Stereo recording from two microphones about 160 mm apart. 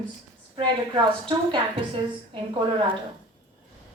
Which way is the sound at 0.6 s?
30° right (ahead or behind).